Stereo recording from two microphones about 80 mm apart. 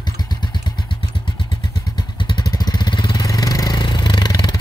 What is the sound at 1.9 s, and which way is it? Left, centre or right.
Vehicle, left.